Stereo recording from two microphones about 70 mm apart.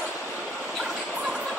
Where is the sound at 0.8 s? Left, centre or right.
Centre.